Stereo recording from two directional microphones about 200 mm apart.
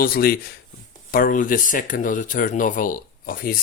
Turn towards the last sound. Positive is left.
turn(degrees=45)  # may be behind; listen again after turning